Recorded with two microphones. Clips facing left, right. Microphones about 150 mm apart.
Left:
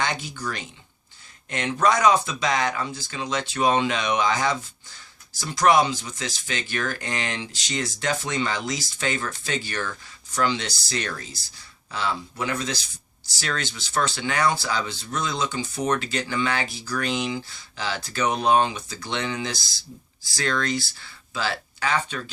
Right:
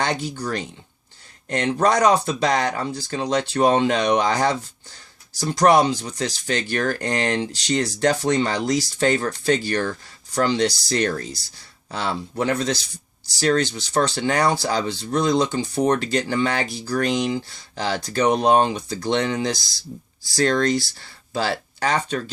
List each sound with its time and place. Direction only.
0.0 s speech: 35° right (ahead or behind)